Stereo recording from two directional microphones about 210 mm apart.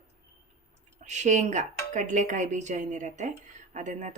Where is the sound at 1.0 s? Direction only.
35° right (ahead or behind).